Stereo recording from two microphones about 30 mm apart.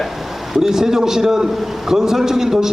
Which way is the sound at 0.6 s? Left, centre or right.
Centre.